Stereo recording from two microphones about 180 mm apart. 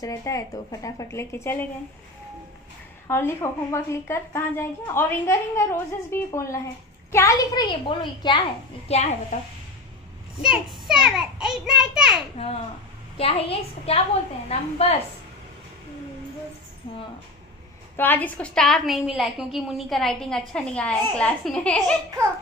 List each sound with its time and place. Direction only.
0.0 s a woman's voice: 15° left (ahead or behind)
3.1 s a woman's voice: 15° left (ahead or behind)
8.8 s a woman's voice: 35° left (ahead or behind)
11.1 s a woman's voice: 5° right (ahead or behind)
13.2 s a woman's voice: 35° left (ahead or behind)
17.9 s a woman's voice: 10° left (ahead or behind)